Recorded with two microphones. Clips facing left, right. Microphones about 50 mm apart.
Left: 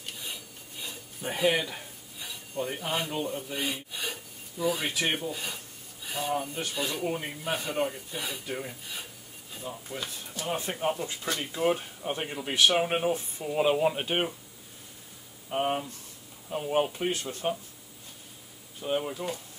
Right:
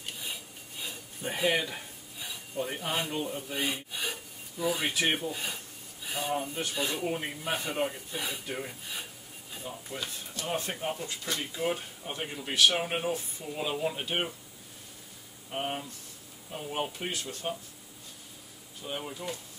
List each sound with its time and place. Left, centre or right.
0.8 s a sound: centre
2.5 s speech: centre
11.6 s speech: left
13.1 s speech: left
15.5 s speech: left
17.1 s speech: left
18.8 s speech: left